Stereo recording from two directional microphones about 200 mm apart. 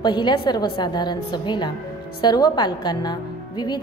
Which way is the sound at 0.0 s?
20° left (ahead or behind).